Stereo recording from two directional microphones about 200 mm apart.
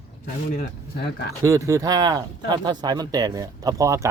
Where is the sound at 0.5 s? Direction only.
55° left (ahead or behind).